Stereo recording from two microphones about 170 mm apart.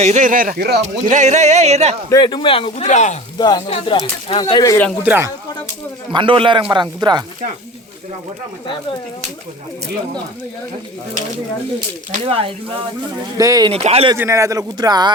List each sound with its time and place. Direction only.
0.0 s speech: 45° right (ahead or behind); by 0.8 s 60° right (ahead or behind)
0.8 s speech: 45° right (ahead or behind)
2.0 s speech: 25° left (ahead or behind); by 3.2 s 45° left (ahead or behind)
3.3 s speech: 25° left (ahead or behind)
5.0 s speech: 10° right (ahead or behind)
6.1 s speech: 30° right (ahead or behind)
12.3 s speech: 35° right (ahead or behind)
13.3 s speech: 20° right (ahead or behind)
13.7 s speech: 35° right (ahead or behind)
14.2 s speech: 15° right (ahead or behind)